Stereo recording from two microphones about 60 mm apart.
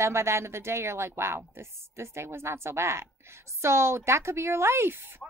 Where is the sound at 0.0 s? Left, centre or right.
Right.